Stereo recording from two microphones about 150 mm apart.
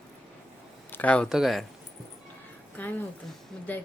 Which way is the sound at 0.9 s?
10° left (ahead or behind).